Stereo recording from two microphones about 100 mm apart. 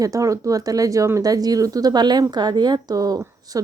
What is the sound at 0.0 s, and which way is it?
Speech, 35° right (ahead or behind).